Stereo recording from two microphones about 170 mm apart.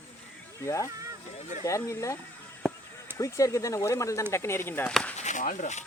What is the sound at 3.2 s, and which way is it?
Speech, 20° left (ahead or behind).